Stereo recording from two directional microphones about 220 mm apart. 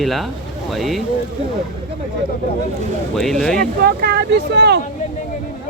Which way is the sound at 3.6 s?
45° right (ahead or behind).